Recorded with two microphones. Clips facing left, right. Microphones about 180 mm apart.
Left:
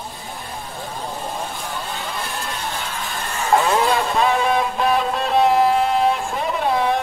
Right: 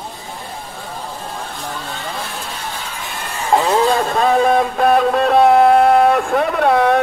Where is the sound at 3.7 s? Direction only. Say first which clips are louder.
Right 3 dB; 40° right (ahead or behind).